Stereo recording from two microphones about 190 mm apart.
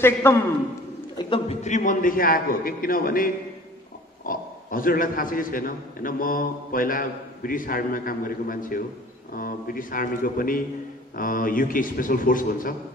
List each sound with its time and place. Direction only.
0.0 s a man's voice: 10° left (ahead or behind)
1.1 s a man's voice: 30° left (ahead or behind); by 12.7 s 45° left (ahead or behind)